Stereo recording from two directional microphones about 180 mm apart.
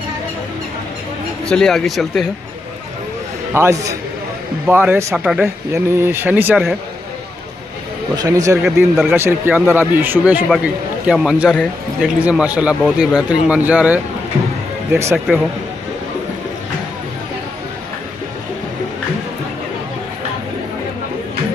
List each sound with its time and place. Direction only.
1.5 s speech: 5° left (ahead or behind)
3.5 s a man's voice: 15° right (ahead or behind)
8.2 s a man's voice: 20° right (ahead or behind)